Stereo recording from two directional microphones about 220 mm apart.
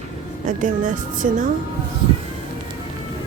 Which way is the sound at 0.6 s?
35° right (ahead or behind).